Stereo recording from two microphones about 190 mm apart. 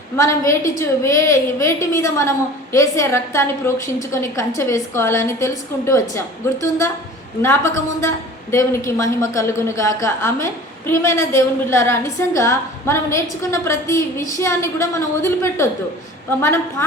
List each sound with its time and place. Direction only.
0.2 s a woman's voice: 15° left (ahead or behind)